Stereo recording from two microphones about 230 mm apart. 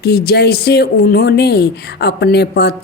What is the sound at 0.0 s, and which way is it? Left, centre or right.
A woman's voice, left.